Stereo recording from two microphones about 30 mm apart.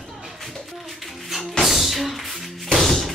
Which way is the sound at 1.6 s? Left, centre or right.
Centre.